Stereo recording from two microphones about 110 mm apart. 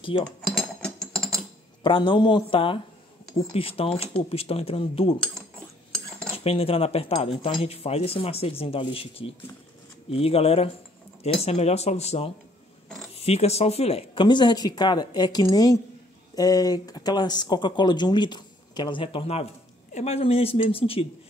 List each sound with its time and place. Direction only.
0.1 s speech: 50° left (ahead or behind)
0.5 s ratchet: centre (ahead or behind)
1.8 s speech: 50° left (ahead or behind)
6.3 s a woman's voice: 60° left (ahead or behind)
14.2 s speech: 45° left (ahead or behind); by 19.4 s 60° left (ahead or behind)
19.9 s speech: 80° left; by 21.1 s 60° left (ahead or behind)